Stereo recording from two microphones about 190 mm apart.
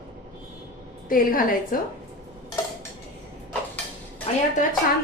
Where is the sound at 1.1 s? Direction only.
45° left (ahead or behind).